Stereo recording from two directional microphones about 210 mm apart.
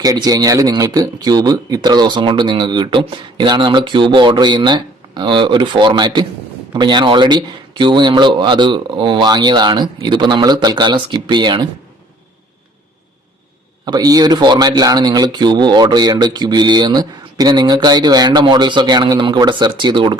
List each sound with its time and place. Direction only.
0.0 s speech: 15° right (ahead or behind)
13.8 s speech: 20° right (ahead or behind)